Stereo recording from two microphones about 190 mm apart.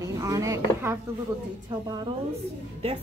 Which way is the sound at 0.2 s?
15° right (ahead or behind).